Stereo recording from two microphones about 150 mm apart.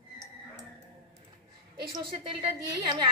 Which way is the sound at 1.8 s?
30° right (ahead or behind).